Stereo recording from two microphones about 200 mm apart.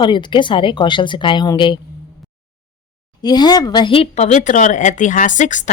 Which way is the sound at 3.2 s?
20° left (ahead or behind).